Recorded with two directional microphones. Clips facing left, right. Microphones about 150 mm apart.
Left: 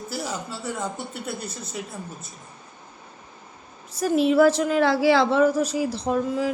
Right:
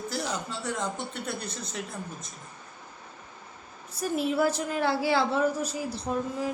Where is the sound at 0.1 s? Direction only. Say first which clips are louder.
Left 3 dB; 5° left (ahead or behind).